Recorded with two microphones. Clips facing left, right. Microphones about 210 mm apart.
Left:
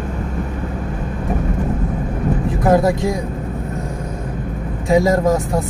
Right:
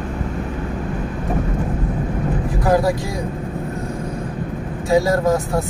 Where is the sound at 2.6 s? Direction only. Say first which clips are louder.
Left 3 dB; 20° left (ahead or behind).